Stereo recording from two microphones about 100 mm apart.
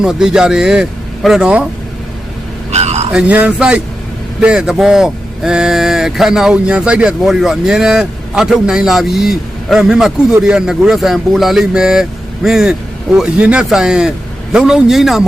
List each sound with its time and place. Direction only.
0.0 s speech: 5° right (ahead or behind)
2.7 s a sound: 90° right
3.1 s speech: 10° right (ahead or behind)